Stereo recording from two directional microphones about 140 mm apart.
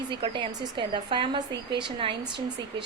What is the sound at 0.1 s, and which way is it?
A woman's voice, 35° right (ahead or behind).